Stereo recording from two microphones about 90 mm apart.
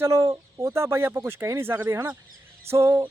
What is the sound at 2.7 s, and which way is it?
Music, 30° right (ahead or behind).